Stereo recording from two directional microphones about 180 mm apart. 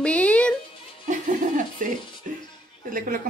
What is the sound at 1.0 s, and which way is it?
Speech, 45° right (ahead or behind).